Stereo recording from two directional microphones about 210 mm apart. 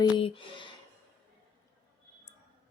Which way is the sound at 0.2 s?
25° left (ahead or behind).